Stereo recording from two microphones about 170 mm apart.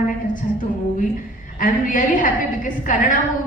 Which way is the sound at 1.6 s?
50° left (ahead or behind).